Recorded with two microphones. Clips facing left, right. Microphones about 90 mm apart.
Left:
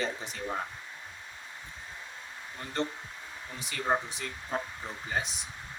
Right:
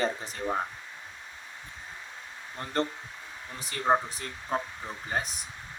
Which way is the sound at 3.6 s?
40° right (ahead or behind).